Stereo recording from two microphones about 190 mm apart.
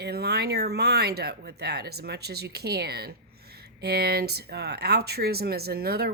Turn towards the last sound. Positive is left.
turn(degrees=-55)  # may be behind; listen again after turning